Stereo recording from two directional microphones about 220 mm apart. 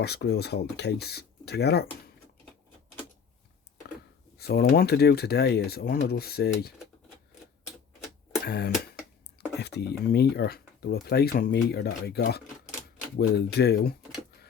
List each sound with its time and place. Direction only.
0.0 s speech: 50° left (ahead or behind)
4.4 s speech: 45° left (ahead or behind)
8.4 s speech: 45° left (ahead or behind)